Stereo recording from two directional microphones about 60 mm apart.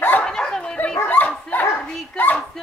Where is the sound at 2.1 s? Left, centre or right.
Left.